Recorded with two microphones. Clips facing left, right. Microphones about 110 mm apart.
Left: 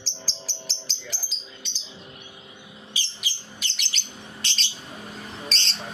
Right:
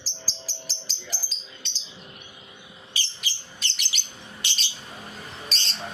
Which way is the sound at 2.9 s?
15° left (ahead or behind).